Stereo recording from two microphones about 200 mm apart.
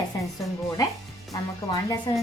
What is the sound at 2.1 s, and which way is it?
Speech, 20° left (ahead or behind).